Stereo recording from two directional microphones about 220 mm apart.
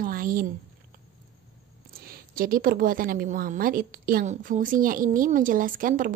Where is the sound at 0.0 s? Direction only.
40° right (ahead or behind).